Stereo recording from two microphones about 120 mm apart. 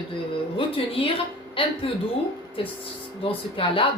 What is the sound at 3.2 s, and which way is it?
Speech, 50° left (ahead or behind).